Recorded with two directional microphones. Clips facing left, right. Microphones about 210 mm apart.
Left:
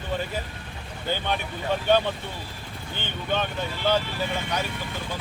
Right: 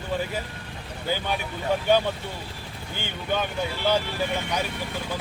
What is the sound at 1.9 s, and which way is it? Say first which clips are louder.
Speech: left 1 dB; 10° right (ahead or behind).